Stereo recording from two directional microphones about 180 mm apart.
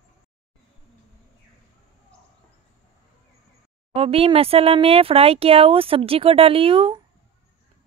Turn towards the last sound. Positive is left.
turn(degrees=-30)  # may be behind; listen again after turning